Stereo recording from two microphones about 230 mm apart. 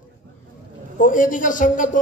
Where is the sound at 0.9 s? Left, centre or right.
Left.